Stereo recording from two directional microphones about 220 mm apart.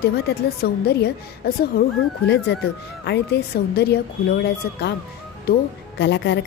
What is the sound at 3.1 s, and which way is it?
Speech, 50° left (ahead or behind).